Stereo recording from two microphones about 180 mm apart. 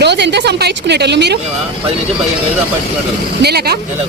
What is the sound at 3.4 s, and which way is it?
Speech, 60° right (ahead or behind).